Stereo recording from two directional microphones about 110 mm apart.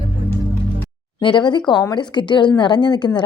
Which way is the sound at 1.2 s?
45° left (ahead or behind).